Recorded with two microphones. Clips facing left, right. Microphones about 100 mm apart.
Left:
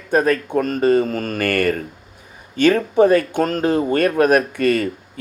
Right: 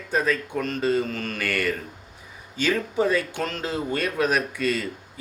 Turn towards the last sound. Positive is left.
turn(degrees=55)  # may be behind; listen again after turning